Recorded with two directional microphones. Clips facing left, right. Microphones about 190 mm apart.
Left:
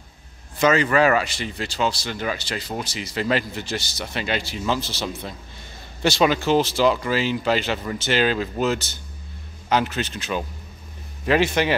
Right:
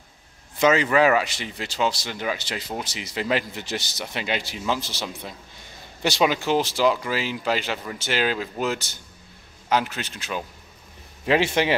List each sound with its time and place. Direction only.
0.6 s speech: 20° right (ahead or behind)
11.2 s speech: 25° right (ahead or behind)